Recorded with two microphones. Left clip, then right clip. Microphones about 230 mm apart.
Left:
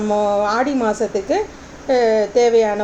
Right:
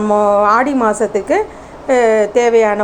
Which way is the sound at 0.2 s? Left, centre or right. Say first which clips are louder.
Right 7 dB; centre.